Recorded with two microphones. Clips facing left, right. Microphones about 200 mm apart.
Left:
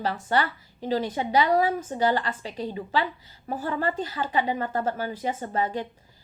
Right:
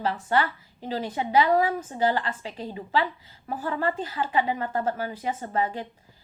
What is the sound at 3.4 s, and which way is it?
A woman's voice, 30° left (ahead or behind).